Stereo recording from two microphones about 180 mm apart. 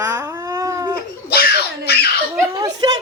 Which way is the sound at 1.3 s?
60° left (ahead or behind).